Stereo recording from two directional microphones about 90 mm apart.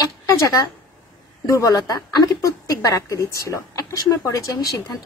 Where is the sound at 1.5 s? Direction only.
40° left (ahead or behind).